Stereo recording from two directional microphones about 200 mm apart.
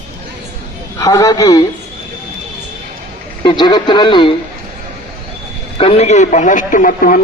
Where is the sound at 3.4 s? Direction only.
20° left (ahead or behind).